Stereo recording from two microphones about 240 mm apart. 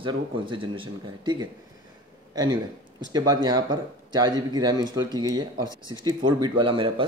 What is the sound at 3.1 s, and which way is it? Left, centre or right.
Speech, centre.